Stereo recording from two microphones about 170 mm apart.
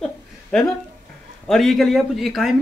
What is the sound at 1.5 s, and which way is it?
Speech, centre (ahead or behind).